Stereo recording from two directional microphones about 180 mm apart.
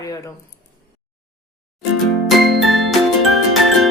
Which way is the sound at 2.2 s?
Centre (ahead or behind).